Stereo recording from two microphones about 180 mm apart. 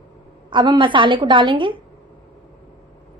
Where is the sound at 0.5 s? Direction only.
25° right (ahead or behind).